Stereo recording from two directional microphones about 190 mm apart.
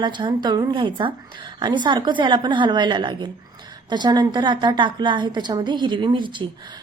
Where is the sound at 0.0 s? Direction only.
25° right (ahead or behind).